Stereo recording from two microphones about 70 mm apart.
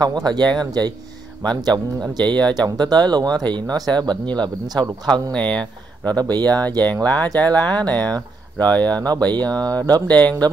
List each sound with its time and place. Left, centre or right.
0.0 s speech: right
5.3 s speech: centre
6.1 s speech: right
6.5 s speech: right
7.4 s speech: right
8.5 s speech: left
9.3 s speech: right
10.0 s speech: left